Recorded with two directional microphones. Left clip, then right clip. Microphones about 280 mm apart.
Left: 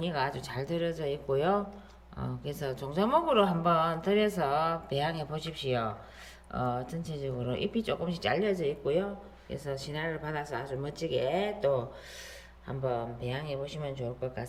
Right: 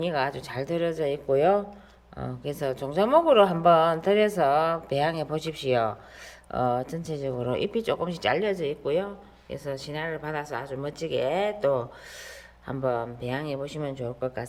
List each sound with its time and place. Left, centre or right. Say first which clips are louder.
0.0 s speech: right 5 dB; centre